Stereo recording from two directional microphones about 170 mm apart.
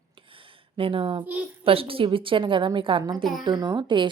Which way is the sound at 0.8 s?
30° right (ahead or behind).